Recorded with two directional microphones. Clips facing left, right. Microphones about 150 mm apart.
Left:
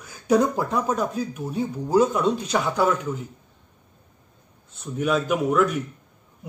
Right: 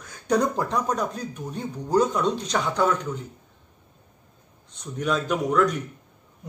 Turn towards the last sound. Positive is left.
turn(degrees=5)  # may be behind; listen again after turning